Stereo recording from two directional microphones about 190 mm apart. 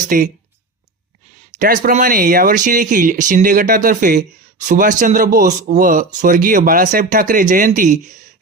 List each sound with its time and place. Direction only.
0.1 s speech: 50° right (ahead or behind)
1.5 s speech: 45° right (ahead or behind)